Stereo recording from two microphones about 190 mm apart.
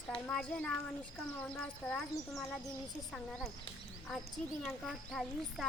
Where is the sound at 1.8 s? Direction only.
5° left (ahead or behind).